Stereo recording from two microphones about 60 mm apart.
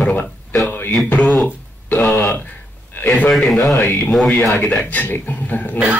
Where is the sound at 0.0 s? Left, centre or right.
Left.